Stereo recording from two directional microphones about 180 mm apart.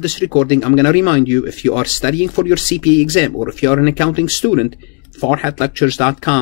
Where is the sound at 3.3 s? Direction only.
25° left (ahead or behind).